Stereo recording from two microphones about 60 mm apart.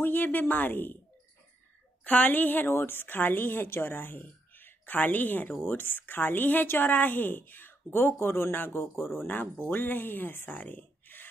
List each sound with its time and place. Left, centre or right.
0.0 s a woman's voice: left
2.0 s a woman's voice: left
10.6 s a sound: left